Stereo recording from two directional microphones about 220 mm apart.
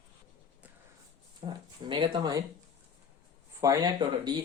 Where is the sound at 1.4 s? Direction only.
25° right (ahead or behind).